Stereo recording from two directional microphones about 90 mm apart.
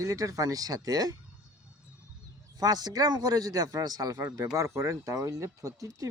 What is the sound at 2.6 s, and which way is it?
Speech, 50° right (ahead or behind).